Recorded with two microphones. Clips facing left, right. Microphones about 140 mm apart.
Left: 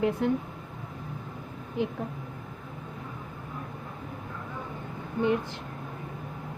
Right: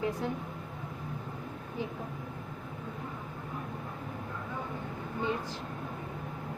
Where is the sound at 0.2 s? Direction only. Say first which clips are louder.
Left 8 dB; 65° left (ahead or behind).